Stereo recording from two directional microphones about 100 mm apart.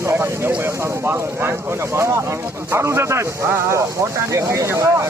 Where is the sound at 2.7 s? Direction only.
25° right (ahead or behind).